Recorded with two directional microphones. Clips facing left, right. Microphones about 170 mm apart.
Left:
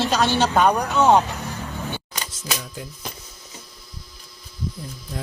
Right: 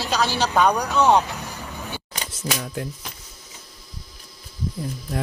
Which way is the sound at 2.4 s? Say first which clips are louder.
Right 5 dB; 65° right (ahead or behind).